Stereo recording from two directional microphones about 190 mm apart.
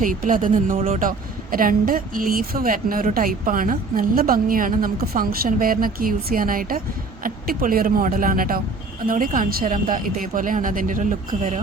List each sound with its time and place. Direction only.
0.0 s a woman's voice: 45° right (ahead or behind)